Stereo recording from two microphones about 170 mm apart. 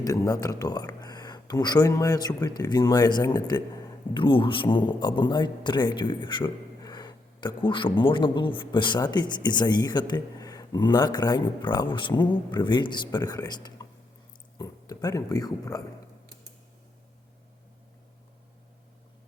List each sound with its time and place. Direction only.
0.0 s a man's voice: 20° left (ahead or behind)